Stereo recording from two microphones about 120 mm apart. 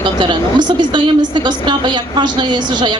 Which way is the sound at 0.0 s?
40° right (ahead or behind).